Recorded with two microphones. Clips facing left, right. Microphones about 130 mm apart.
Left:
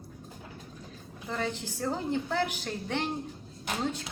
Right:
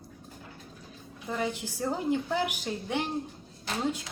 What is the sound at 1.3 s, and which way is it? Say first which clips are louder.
A woman's voice: right 1 dB; 10° right (ahead or behind).